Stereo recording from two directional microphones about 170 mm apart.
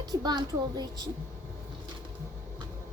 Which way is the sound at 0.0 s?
25° right (ahead or behind).